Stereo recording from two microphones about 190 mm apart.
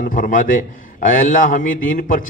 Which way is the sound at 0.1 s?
45° left (ahead or behind).